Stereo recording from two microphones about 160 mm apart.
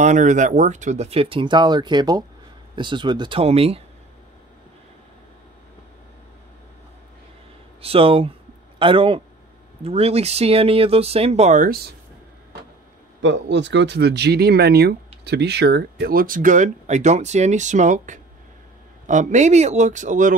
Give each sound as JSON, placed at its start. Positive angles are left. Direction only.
{"t": 0.0, "sound": "speech", "side_deg": -50}
{"t": 7.8, "sound": "speech", "side_deg": -35}
{"t": 13.5, "sound": "speech", "side_deg": -90}